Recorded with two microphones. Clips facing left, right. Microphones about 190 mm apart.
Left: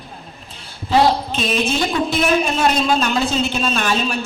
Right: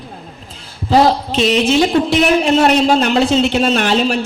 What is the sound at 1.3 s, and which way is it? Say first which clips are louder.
A man's voice: right 7 dB; 80° right.